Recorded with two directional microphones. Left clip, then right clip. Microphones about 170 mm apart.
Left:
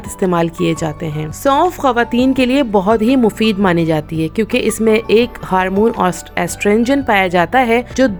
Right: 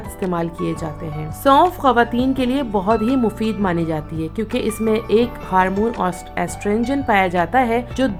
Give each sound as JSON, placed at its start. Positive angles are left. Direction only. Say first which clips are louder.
{"t": 0.2, "sound": "speech", "louder": "left 8 dB", "side_deg": 40}